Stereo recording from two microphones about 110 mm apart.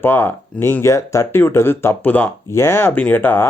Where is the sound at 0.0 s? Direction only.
20° left (ahead or behind).